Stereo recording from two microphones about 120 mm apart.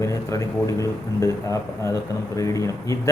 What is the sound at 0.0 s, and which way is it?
A man's voice, 25° left (ahead or behind).